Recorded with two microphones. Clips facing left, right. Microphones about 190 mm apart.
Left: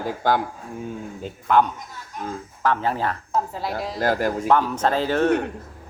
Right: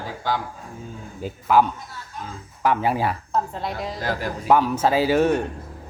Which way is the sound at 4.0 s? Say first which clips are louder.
Left 9 dB; 50° left (ahead or behind).